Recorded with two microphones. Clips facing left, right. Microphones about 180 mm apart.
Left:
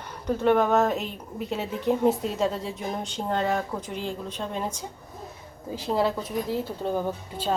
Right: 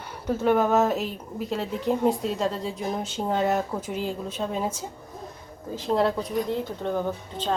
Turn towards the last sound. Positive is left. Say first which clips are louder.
# even
turn(degrees=10)  # may be behind; listen again after turning